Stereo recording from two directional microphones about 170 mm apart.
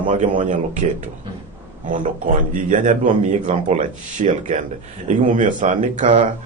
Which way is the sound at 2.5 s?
50° right (ahead or behind).